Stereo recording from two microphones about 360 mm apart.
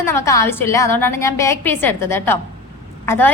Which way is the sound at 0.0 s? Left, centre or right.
Centre.